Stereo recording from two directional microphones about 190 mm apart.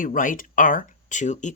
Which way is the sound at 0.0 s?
45° left (ahead or behind).